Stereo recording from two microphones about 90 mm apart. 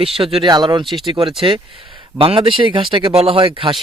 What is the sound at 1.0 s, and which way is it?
Speech, 70° right (ahead or behind).